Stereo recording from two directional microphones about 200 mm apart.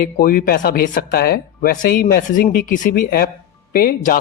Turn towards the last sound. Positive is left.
turn(degrees=45)  # may be behind; listen again after turning